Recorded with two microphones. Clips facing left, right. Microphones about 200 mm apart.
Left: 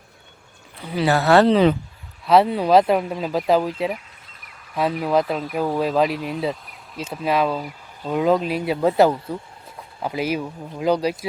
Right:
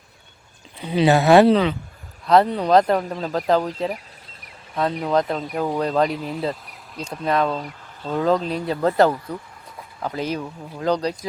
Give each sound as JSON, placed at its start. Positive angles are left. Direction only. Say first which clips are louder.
{"t": 0.8, "sound": "speech", "louder": "right 3 dB", "side_deg": -20}
{"t": 2.2, "sound": "speech", "louder": "left 1 dB", "side_deg": 5}